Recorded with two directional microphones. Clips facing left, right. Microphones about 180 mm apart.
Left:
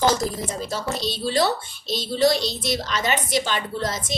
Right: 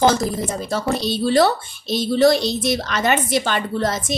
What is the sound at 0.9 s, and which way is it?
A woman's voice, 55° right (ahead or behind).